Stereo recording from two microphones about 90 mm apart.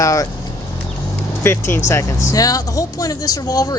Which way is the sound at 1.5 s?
25° left (ahead or behind).